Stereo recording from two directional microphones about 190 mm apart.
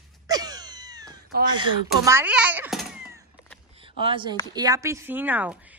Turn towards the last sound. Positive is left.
turn(degrees=-10)  # may be behind; listen again after turning